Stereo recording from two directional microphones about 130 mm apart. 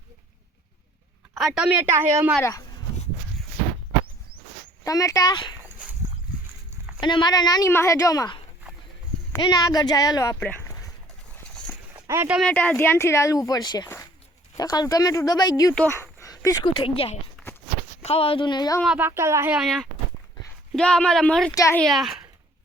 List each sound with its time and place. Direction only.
1.4 s a woman's voice: centre (ahead or behind); by 2.3 s 20° right (ahead or behind)
2.4 s speech: 25° left (ahead or behind)
4.8 s speech: 25° left (ahead or behind)
7.0 s speech: 35° left (ahead or behind)
9.4 s speech: 30° left (ahead or behind)
10.6 s a sound: 25° left (ahead or behind)
12.0 s speech: 20° right (ahead or behind)
12.5 s speech: 10° left (ahead or behind); by 15.7 s 30° left (ahead or behind)
15.9 s a sound: 25° left (ahead or behind)
16.7 s speech: 45° left (ahead or behind)
18.9 s speech: 20° right (ahead or behind)
19.5 s speech: centre (ahead or behind)
21.5 s speech: 25° left (ahead or behind)
21.8 s speech: centre (ahead or behind)